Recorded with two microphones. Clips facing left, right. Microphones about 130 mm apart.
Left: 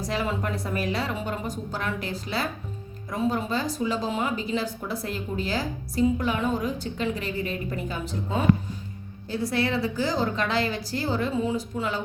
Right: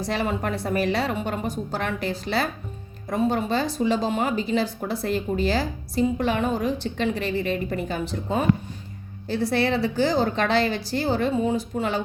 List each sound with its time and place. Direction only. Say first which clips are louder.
0.0 s speech: right 3 dB; 70° right (ahead or behind)